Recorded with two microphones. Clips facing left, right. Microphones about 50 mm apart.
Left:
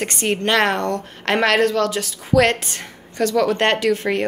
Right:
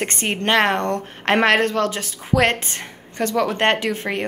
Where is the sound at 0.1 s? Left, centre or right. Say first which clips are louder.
Left 1 dB; right.